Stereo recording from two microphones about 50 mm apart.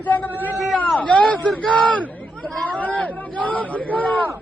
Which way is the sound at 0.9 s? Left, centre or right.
Left.